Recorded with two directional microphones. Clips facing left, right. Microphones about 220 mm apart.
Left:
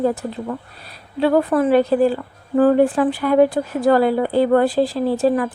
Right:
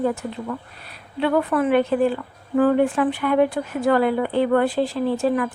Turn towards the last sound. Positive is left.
turn(degrees=35)  # may be behind; listen again after turning